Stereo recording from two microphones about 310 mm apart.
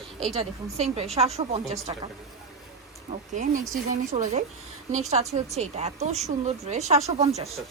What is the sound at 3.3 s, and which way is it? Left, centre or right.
Speech, right.